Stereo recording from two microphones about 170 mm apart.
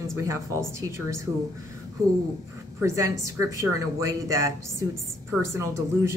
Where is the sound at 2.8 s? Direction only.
20° right (ahead or behind).